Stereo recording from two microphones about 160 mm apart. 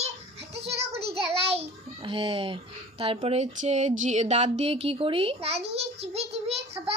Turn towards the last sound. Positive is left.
turn(degrees=-40)  # may be behind; listen again after turning